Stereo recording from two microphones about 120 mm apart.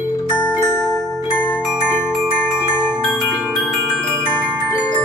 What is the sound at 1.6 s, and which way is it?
Glockenspiel, 5° right (ahead or behind).